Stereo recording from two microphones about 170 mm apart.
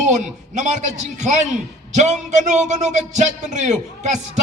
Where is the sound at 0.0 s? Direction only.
45° right (ahead or behind).